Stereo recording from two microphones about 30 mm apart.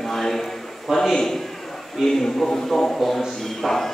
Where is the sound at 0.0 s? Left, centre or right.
Centre.